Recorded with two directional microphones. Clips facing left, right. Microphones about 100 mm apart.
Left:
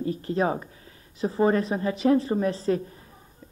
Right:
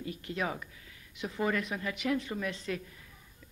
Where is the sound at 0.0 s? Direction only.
35° left (ahead or behind).